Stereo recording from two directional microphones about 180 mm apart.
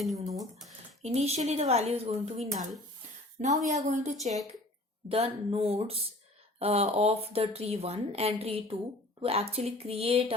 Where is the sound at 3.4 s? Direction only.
40° right (ahead or behind).